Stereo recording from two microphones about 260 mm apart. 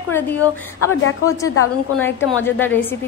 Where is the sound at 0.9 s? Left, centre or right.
Left.